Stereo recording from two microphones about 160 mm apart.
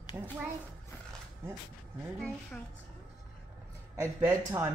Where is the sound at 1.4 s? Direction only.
15° right (ahead or behind).